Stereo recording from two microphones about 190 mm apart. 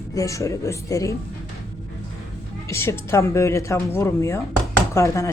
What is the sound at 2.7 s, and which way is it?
Speech, 15° left (ahead or behind).